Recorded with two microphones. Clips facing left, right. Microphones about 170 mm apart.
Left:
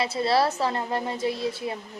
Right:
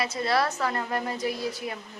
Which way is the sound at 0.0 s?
30° left (ahead or behind).